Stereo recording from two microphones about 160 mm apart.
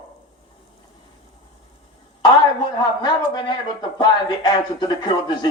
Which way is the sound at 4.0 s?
25° left (ahead or behind).